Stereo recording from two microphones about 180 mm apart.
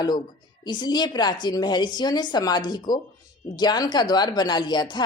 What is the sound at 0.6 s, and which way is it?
Speech, 25° left (ahead or behind).